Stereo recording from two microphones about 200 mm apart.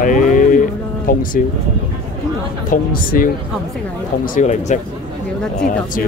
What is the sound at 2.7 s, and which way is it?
Speech, 45° left (ahead or behind).